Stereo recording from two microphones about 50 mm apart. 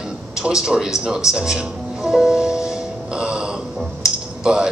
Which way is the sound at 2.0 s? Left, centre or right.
Centre.